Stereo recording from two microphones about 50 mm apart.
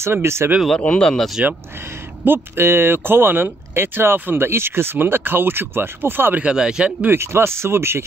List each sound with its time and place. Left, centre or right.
0.0 s speech: right
0.7 s speech: left
2.2 s speech: right
6.4 s speech: centre
7.1 s speech: right